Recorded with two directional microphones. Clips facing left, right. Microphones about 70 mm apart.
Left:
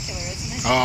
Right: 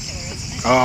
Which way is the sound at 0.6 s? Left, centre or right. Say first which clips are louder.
Right 5 dB; centre.